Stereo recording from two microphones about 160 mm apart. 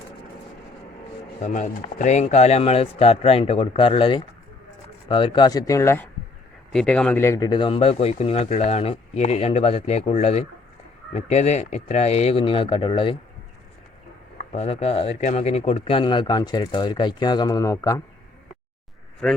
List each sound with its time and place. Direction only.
1.4 s speech: 50° left (ahead or behind); by 6.1 s 15° left (ahead or behind)
6.7 s speech: 5° left (ahead or behind); by 13.1 s 30° left (ahead or behind)
14.5 s speech: 40° left (ahead or behind); by 18.0 s 20° left (ahead or behind)
19.2 s speech: 5° left (ahead or behind)